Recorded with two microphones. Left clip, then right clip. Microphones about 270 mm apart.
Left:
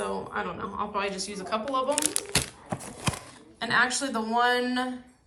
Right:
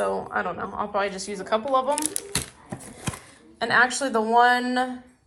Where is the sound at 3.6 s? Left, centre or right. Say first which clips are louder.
Right 4 dB; right.